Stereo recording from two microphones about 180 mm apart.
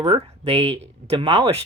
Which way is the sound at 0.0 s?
30° right (ahead or behind).